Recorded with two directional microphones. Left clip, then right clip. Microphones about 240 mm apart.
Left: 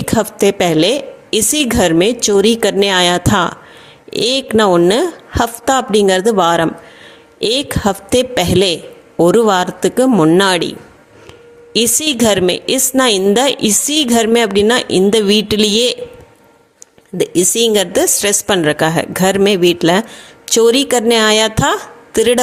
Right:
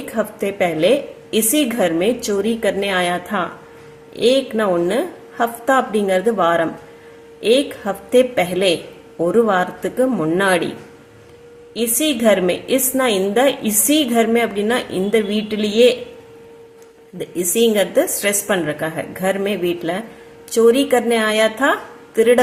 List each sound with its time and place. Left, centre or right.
0.2 s a woman's voice: left
11.7 s a woman's voice: left
17.2 s a woman's voice: left